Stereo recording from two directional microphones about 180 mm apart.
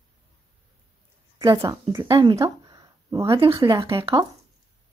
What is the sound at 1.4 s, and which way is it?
Speech, 20° right (ahead or behind).